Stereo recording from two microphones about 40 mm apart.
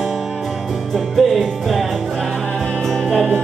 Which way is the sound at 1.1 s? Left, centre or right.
Centre.